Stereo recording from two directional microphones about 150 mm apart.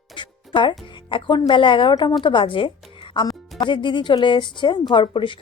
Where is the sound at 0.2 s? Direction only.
30° left (ahead or behind).